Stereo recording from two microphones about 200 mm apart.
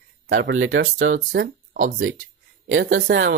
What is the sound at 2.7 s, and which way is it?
Speech, 70° right (ahead or behind).